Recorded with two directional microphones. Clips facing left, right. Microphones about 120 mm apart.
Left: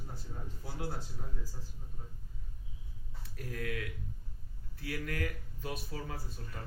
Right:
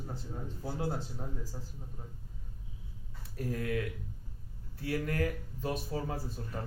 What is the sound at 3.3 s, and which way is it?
Speech, 30° right (ahead or behind).